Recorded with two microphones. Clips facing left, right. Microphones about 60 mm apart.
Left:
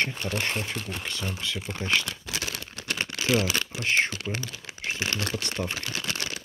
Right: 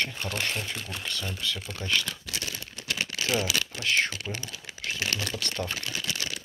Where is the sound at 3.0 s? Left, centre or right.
Left.